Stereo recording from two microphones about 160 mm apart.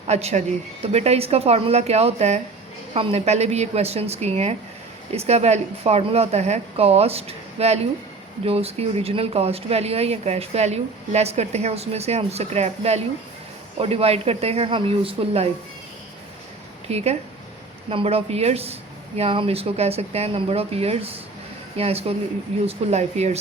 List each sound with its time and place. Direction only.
0.1 s speech: 40° right (ahead or behind)
16.9 s speech: 40° right (ahead or behind)